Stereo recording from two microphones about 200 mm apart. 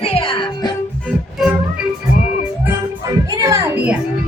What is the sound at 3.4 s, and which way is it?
Music, 15° right (ahead or behind).